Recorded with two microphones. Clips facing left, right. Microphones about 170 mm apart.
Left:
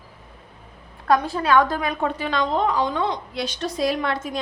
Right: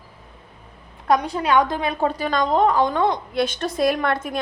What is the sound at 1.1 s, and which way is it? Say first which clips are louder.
A woman's voice: even; 20° right (ahead or behind).